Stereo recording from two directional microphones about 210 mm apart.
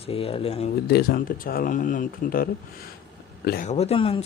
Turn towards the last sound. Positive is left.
turn(degrees=25)  # may be behind; listen again after turning